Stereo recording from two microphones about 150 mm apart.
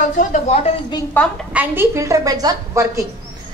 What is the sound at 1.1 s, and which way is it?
Speech, 10° left (ahead or behind).